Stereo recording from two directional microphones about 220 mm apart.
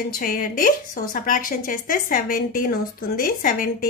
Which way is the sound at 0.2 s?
40° left (ahead or behind).